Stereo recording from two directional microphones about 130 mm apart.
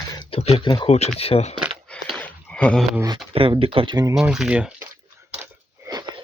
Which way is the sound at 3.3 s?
45° right (ahead or behind).